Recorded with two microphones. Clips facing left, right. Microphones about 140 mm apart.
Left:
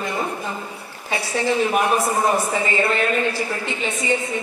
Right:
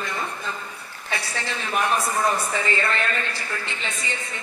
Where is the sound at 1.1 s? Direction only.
15° left (ahead or behind).